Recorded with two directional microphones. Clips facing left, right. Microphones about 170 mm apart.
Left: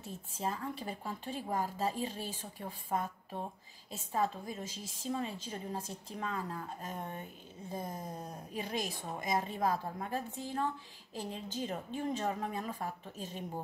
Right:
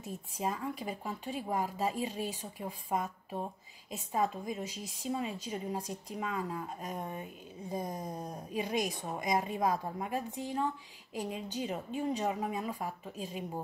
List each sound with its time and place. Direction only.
0.0 s speech: 15° right (ahead or behind)